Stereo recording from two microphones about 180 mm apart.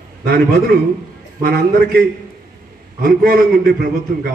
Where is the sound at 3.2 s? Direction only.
55° right (ahead or behind).